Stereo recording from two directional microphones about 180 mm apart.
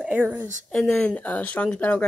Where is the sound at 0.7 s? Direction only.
Centre (ahead or behind).